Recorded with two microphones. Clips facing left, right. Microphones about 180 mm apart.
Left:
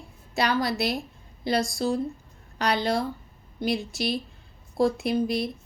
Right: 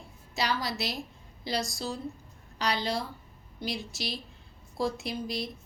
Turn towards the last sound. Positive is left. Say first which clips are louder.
# left 9 dB
turn(degrees=55)  # may be behind; listen again after turning